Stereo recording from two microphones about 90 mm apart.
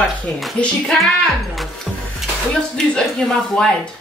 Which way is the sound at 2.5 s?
10° left (ahead or behind).